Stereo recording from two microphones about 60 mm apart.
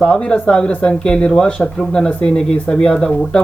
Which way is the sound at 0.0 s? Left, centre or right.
Centre.